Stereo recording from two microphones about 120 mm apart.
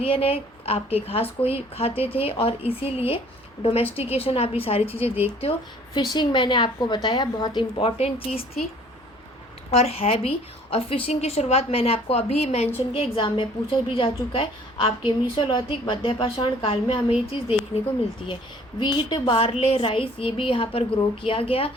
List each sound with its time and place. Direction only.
0.0 s a woman's voice: 50° left (ahead or behind)
5.0 s speech: 15° right (ahead or behind)
5.9 s a woman's voice: 40° left (ahead or behind); by 8.4 s 60° left (ahead or behind)
9.7 s a woman's voice: 60° left (ahead or behind)
12.9 s a woman's voice: 45° left (ahead or behind)
18.8 s a woman's voice: 40° left (ahead or behind)